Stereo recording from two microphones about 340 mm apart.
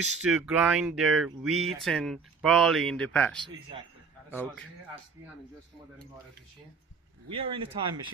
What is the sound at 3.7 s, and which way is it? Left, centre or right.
Speech, centre.